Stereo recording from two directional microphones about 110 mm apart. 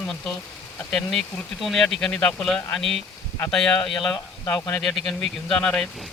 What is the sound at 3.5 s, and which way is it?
Speech, 5° left (ahead or behind).